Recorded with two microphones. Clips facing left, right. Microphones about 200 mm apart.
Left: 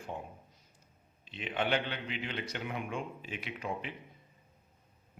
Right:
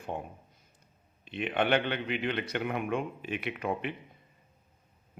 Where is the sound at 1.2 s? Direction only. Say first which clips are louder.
Right 5 dB; 60° right (ahead or behind).